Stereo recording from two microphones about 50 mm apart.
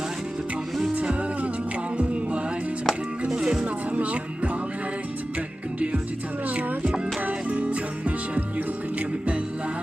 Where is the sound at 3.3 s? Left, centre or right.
Centre.